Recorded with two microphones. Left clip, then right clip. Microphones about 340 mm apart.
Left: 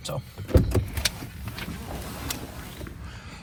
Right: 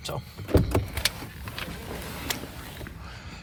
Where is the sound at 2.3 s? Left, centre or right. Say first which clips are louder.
Right 4 dB; right.